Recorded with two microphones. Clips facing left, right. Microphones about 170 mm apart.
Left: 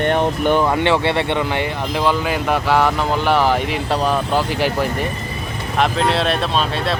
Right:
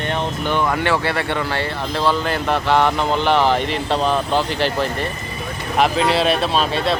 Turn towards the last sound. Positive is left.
turn(degrees=0)  # may be behind; listen again after turning